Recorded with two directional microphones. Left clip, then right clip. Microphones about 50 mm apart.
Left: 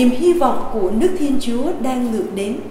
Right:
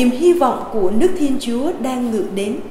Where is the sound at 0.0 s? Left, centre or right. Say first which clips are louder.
Right 1 dB; right.